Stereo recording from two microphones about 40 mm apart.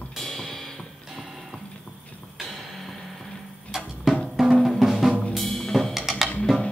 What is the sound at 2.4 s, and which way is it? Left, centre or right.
Music, centre.